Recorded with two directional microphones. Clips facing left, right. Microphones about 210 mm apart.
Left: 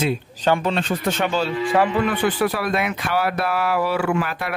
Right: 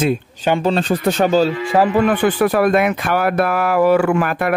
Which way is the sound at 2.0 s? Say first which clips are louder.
Right 5 dB; 50° right (ahead or behind).